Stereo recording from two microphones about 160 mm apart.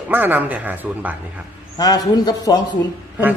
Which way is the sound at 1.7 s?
25° left (ahead or behind).